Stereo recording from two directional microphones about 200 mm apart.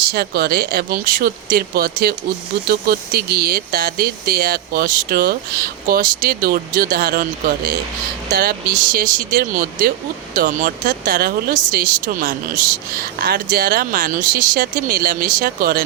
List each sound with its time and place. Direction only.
0.1 s speech: 55° right (ahead or behind)